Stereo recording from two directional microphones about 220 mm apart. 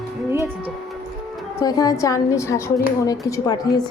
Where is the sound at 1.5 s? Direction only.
15° left (ahead or behind).